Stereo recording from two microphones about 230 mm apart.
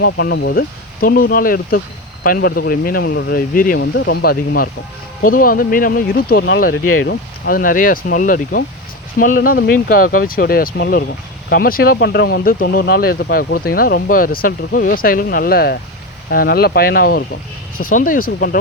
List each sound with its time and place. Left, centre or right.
0.0 s speech: left
6.8 s speech: left